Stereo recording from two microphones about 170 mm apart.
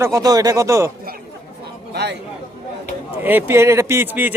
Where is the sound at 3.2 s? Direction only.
15° right (ahead or behind).